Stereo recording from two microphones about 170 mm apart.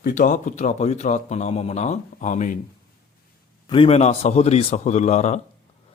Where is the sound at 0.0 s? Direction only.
50° left (ahead or behind).